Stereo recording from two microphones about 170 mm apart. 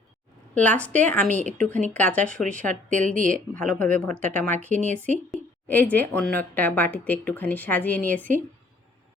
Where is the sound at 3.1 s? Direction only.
50° right (ahead or behind).